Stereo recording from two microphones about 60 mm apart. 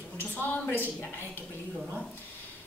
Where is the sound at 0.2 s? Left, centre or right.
Left.